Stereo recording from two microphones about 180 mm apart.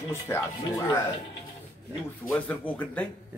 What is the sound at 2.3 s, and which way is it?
Speech, 5° left (ahead or behind).